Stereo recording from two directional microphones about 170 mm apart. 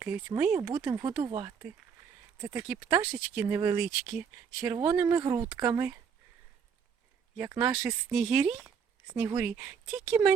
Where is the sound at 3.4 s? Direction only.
15° right (ahead or behind).